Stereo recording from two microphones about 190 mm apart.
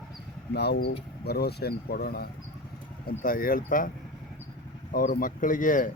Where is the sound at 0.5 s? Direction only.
60° left (ahead or behind).